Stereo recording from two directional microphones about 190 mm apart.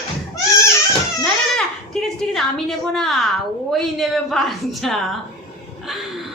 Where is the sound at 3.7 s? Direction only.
Centre (ahead or behind).